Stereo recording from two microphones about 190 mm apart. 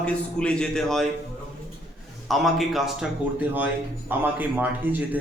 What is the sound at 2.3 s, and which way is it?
A man's voice, centre (ahead or behind).